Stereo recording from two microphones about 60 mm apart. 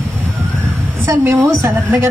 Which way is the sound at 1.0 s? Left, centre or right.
Right.